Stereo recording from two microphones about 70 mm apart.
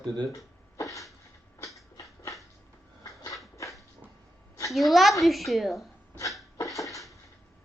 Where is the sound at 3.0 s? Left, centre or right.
Left.